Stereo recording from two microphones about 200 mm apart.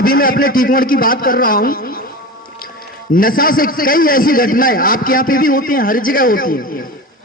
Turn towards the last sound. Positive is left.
turn(degrees=45)  # may be behind; listen again after turning